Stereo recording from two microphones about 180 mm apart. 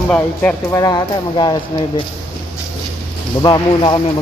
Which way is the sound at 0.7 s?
20° left (ahead or behind).